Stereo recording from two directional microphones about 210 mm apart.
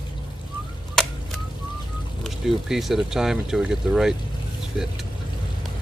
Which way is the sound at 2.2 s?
Centre (ahead or behind).